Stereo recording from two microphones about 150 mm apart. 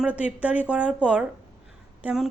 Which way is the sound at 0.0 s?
10° right (ahead or behind).